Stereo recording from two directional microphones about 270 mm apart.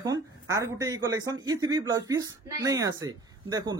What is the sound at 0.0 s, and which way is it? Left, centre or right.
Speech, centre.